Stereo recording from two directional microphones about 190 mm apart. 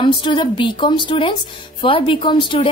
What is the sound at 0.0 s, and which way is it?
A woman's voice, 25° left (ahead or behind).